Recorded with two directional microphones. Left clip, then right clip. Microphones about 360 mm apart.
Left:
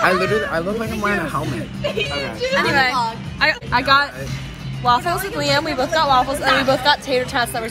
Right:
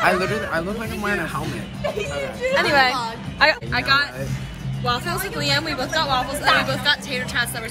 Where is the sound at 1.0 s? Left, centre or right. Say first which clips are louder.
Left 3 dB; centre.